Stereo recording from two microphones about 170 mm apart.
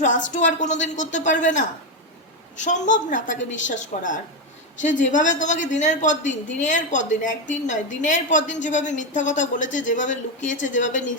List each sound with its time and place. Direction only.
0.3 s a woman's voice: 45° left (ahead or behind)